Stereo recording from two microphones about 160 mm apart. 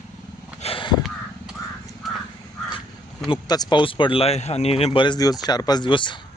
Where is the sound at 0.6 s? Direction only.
30° left (ahead or behind).